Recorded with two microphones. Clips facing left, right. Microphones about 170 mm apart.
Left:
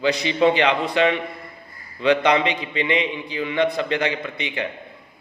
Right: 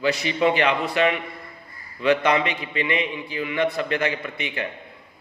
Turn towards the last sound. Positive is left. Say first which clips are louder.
# left 2 dB
turn(degrees=20)  # may be behind; listen again after turning